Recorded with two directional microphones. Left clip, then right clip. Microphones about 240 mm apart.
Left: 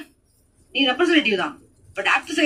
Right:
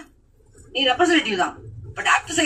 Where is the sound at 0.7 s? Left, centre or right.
Left.